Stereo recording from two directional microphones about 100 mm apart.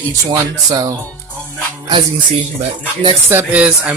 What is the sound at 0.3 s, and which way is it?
Speech, 35° right (ahead or behind).